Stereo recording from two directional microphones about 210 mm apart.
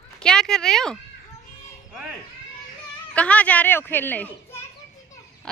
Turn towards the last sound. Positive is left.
turn(degrees=10)  # may be behind; listen again after turning